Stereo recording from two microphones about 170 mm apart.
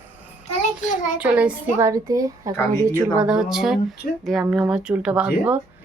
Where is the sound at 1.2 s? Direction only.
10° right (ahead or behind).